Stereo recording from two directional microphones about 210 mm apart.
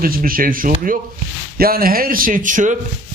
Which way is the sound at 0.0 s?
45° right (ahead or behind).